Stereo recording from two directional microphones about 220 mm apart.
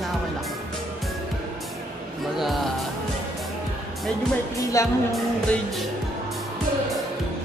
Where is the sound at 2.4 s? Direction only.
Centre (ahead or behind).